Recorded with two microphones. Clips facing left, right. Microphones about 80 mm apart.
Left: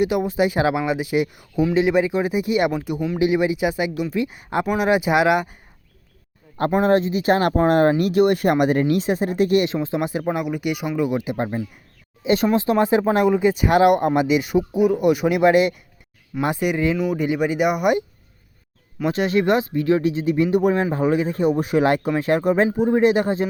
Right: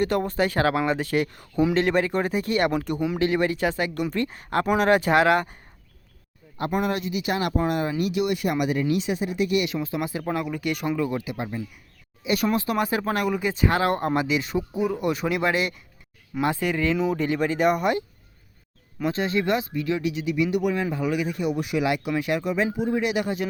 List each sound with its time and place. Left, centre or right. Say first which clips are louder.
0.0 s speech: left 4 dB; centre
4.6 s speech: left 1 dB; centre
6.7 s speech: left 8 dB; left
11.3 s speech: left 6 dB; left
12.2 s speech: left 5 dB; left
19.0 s speech: left 5 dB; left